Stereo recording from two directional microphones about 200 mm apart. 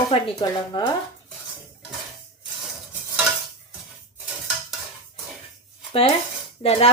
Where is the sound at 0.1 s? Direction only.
30° left (ahead or behind).